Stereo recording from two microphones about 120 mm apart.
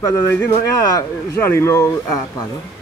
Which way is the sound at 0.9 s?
25° left (ahead or behind).